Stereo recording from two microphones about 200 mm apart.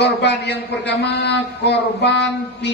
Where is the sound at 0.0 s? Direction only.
55° left (ahead or behind).